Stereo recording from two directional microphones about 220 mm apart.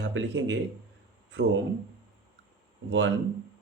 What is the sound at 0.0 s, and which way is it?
Speech, 55° right (ahead or behind).